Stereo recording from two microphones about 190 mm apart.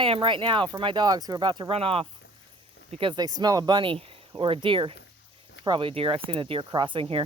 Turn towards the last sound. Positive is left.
turn(degrees=-30)  # may be behind; listen again after turning